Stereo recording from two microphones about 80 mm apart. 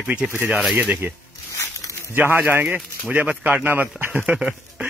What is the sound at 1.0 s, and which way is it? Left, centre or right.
Speech, right.